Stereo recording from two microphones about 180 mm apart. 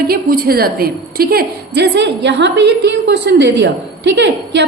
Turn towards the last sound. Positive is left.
turn(degrees=-75)  # may be behind; listen again after turning